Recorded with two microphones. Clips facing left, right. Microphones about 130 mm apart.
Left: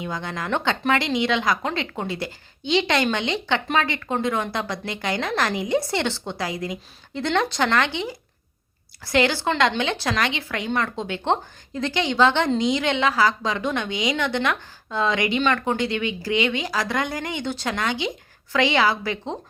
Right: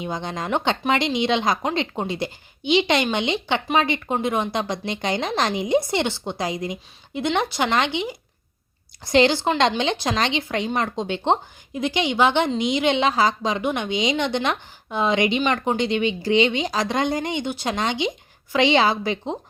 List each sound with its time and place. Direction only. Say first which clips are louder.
0.0 s speech: right 2 dB; 20° right (ahead or behind)